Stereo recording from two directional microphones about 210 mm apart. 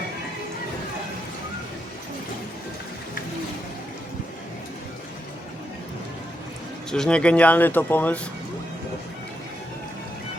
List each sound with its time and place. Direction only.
6.9 s speech: 5° left (ahead or behind)